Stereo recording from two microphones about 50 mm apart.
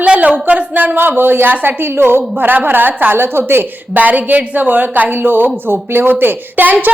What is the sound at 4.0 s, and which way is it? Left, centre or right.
A woman's voice, right.